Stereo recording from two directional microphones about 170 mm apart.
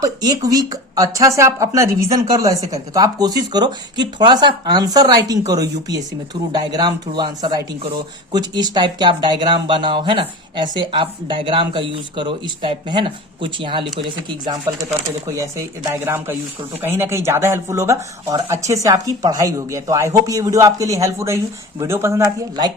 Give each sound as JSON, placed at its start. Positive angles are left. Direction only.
{"t": 0.0, "sound": "speech", "side_deg": -20}